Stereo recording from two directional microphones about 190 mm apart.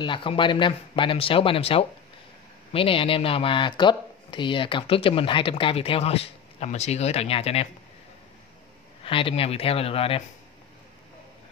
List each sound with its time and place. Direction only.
0.0 s speech: 25° left (ahead or behind)
9.0 s speech: 30° left (ahead or behind)